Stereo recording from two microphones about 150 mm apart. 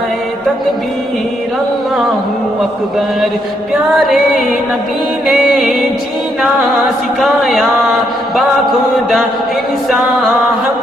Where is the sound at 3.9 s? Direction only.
Centre (ahead or behind).